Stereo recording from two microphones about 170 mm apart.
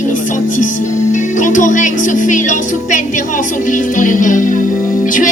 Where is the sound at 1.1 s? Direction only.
50° left (ahead or behind).